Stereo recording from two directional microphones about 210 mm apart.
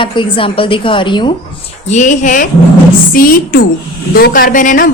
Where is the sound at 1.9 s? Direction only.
35° left (ahead or behind).